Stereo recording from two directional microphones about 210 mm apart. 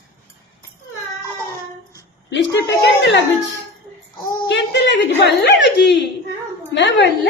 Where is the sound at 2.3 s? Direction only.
60° left (ahead or behind).